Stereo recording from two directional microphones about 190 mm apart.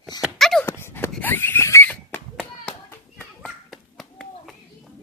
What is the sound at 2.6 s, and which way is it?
Children playing, 10° left (ahead or behind).